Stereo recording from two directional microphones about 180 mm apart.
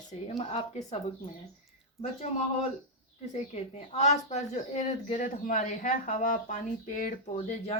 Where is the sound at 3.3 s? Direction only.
40° left (ahead or behind).